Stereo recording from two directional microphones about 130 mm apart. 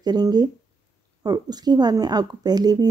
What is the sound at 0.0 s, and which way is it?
Speech, 30° right (ahead or behind).